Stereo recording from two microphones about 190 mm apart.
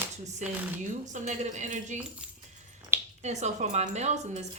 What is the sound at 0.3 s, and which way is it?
Speech, 40° right (ahead or behind).